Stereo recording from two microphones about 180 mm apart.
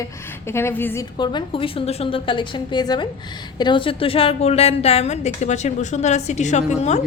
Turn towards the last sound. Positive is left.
turn(degrees=40)  # may be behind; listen again after turning